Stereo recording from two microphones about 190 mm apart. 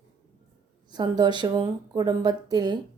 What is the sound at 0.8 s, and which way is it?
A woman's voice, 20° right (ahead or behind).